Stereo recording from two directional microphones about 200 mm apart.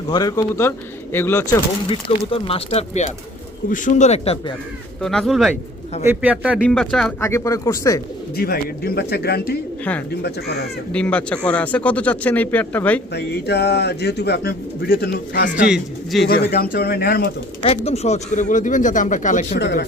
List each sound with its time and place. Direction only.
0.1 s speech: 20° left (ahead or behind)
1.9 s speech: 30° left (ahead or behind)
3.7 s speech: 40° left (ahead or behind)
5.0 s a man's voice: centre (ahead or behind)
7.2 s speech: 15° left (ahead or behind)
8.4 s speech: 50° left (ahead or behind)
10.9 s speech: 5° left (ahead or behind)
13.1 s a man's voice: 55° left (ahead or behind)
15.6 s speech: 5° right (ahead or behind)
16.2 s speech: 50° left (ahead or behind)
17.6 s speech: 30° left (ahead or behind)
19.5 s a man's voice: 55° left (ahead or behind)